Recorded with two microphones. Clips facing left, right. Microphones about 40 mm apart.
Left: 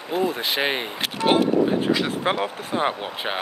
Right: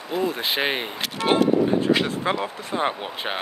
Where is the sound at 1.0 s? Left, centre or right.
Centre.